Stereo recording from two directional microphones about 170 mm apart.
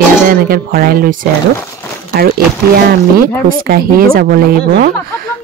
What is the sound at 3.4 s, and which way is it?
Speech, 60° right (ahead or behind).